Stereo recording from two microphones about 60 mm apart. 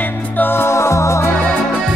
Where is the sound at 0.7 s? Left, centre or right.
Left.